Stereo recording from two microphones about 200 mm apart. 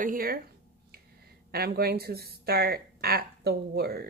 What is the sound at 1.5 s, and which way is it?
Speech, 50° right (ahead or behind).